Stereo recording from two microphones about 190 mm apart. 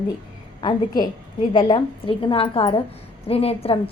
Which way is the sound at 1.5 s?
25° left (ahead or behind).